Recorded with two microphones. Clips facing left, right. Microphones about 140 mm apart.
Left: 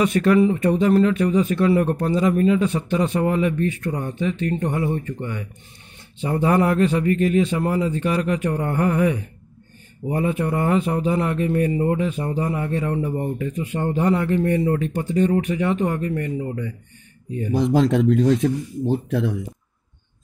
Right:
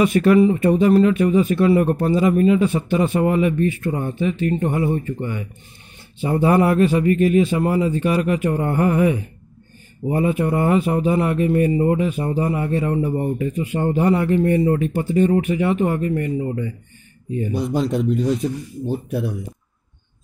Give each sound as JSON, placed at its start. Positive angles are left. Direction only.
{"t": 0.0, "sound": "speech", "side_deg": -5}
{"t": 17.6, "sound": "speech", "side_deg": 90}